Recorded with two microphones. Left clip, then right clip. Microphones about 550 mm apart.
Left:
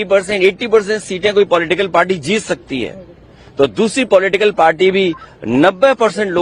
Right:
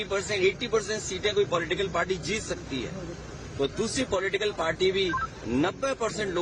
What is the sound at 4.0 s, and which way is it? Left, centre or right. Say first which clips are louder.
A man's voice: left 17 dB; left.